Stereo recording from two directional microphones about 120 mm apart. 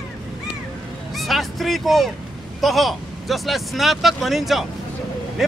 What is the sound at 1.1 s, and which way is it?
Speech, centre (ahead or behind).